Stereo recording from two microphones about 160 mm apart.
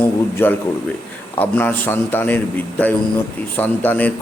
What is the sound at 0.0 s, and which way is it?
A man's voice, 10° left (ahead or behind).